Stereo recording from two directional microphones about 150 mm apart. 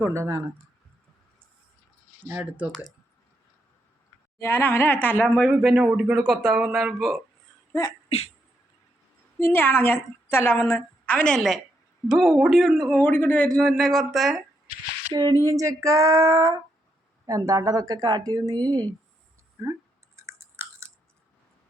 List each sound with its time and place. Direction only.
0.0 s speech: 20° right (ahead or behind)
2.2 s speech: 10° right (ahead or behind)
4.4 s a woman's voice: 15° left (ahead or behind)
5.5 s a man's voice: 5° right (ahead or behind)
7.7 s sneeze: 25° left (ahead or behind)
9.4 s a woman's voice: 10° left (ahead or behind)
13.6 s a man's voice: centre (ahead or behind)
15.1 s speech: 30° right (ahead or behind)
15.4 s speech: 20° right (ahead or behind)
20.1 s chewing: 20° right (ahead or behind)